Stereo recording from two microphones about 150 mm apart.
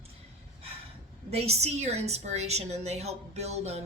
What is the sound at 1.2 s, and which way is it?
A woman's voice, 45° right (ahead or behind).